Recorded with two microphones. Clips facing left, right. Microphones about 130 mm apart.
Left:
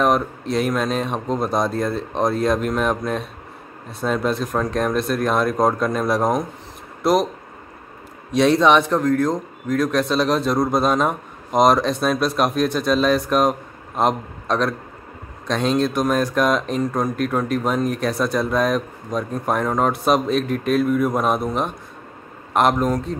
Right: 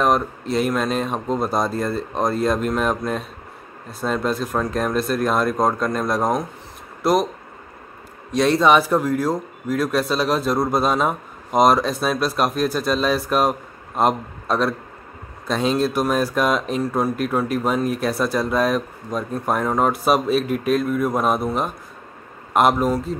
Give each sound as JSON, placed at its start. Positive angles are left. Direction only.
{"t": 0.0, "sound": "a man's voice", "side_deg": 0}
{"t": 8.3, "sound": "a man's voice", "side_deg": 0}